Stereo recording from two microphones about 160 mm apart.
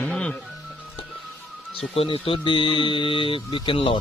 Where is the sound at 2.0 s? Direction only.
35° left (ahead or behind).